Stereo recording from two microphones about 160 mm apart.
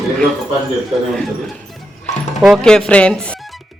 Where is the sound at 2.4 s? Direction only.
Centre (ahead or behind).